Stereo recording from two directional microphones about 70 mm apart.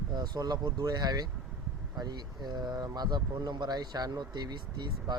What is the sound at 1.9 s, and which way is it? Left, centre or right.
Speech, right.